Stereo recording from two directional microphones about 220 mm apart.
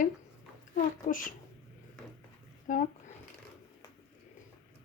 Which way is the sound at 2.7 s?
35° left (ahead or behind).